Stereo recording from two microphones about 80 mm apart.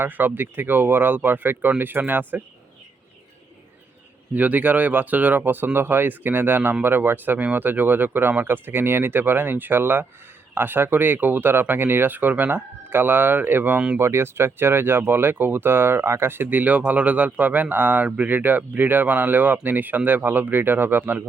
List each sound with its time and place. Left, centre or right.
0.0 s speech: right
4.4 s speech: right